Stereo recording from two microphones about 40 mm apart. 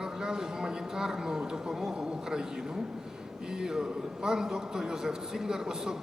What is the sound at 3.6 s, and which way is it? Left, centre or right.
A man's voice, centre.